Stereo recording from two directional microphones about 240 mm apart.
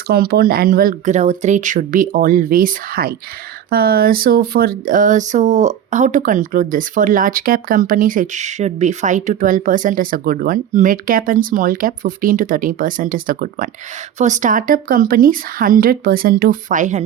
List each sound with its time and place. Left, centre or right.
0.1 s speech: right